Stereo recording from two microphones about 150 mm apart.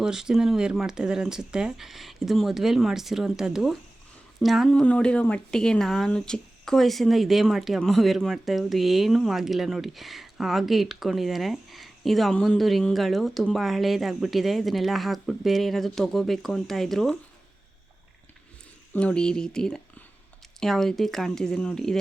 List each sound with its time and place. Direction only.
0.0 s speech: 5° right (ahead or behind)
18.9 s speech: 5° left (ahead or behind)